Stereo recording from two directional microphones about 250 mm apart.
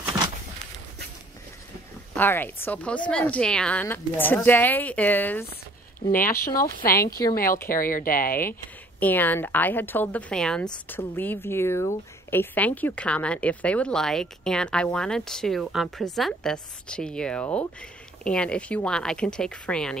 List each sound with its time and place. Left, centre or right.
2.1 s speech: centre
6.1 s speech: left
6.4 s speech: centre
6.8 s speech: left
9.0 s speech: centre